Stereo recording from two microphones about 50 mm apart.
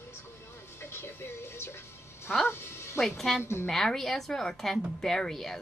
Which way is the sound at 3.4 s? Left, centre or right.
Left.